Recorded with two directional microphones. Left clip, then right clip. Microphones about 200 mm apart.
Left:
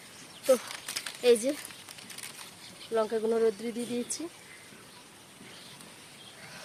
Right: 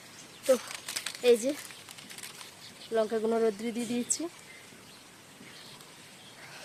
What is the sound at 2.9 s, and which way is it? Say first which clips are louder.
Speech: even; 20° right (ahead or behind).